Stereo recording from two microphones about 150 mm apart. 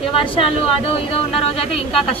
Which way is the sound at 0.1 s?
35° left (ahead or behind).